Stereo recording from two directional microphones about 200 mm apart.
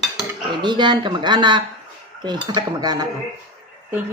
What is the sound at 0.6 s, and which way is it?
Speech, 20° right (ahead or behind).